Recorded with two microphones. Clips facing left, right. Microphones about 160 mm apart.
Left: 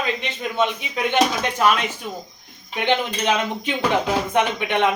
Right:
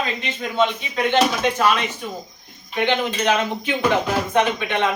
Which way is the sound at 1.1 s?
10° left (ahead or behind).